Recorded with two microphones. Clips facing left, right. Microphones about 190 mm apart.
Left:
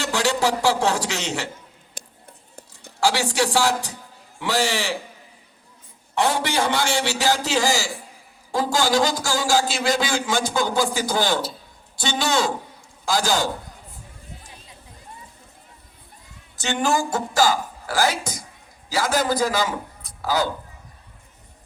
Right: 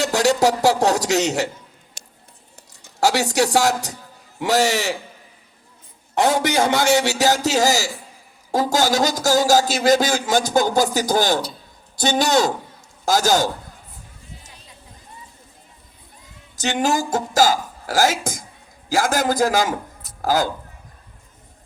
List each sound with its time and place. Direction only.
0.0 s a man's voice: 40° right (ahead or behind)
2.0 s a sound: 55° left (ahead or behind)
3.0 s a man's voice: 45° right (ahead or behind)
6.1 s a man's voice: 45° right (ahead or behind)
16.6 s a man's voice: 40° right (ahead or behind)